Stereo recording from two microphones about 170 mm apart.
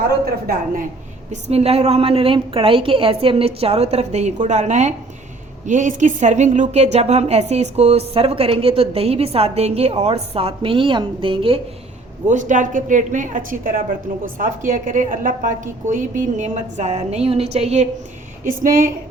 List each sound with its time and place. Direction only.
1.3 s a woman's voice: 40° right (ahead or behind)
12.3 s a woman's voice: 50° right (ahead or behind)
18.4 s a woman's voice: 55° right (ahead or behind)